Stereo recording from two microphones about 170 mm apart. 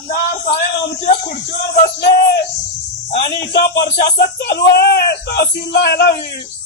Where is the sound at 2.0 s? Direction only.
70° left (ahead or behind).